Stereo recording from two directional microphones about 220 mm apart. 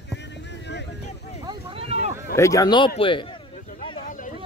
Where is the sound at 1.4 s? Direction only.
25° right (ahead or behind).